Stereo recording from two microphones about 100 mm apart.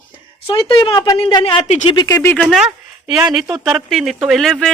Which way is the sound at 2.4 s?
5° right (ahead or behind).